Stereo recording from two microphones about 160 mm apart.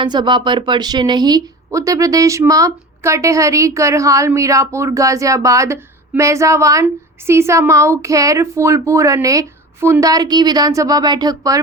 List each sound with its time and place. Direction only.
0.0 s speech: 30° right (ahead or behind)